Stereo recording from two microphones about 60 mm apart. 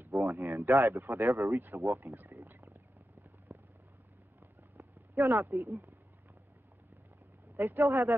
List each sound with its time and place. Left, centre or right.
0.1 s speech: right
2.1 s wild animals: right
3.5 s vehicle: right
5.1 s speech: right
5.5 s speech: right
7.5 s speech: right
7.8 s speech: right